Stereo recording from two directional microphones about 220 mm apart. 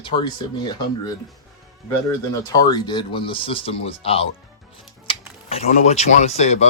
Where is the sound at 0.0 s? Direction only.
20° left (ahead or behind).